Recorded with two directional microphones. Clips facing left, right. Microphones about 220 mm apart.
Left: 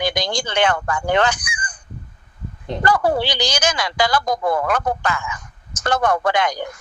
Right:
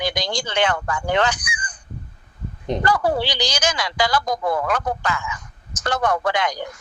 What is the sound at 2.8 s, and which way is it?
Speech, 50° left (ahead or behind).